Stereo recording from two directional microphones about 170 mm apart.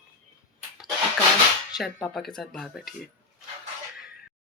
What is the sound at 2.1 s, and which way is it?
Speech, centre (ahead or behind).